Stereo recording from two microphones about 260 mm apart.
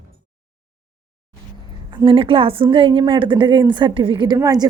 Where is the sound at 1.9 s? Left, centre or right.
Centre.